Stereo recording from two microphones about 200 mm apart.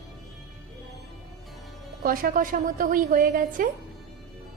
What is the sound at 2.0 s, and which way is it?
A woman's voice, 45° right (ahead or behind).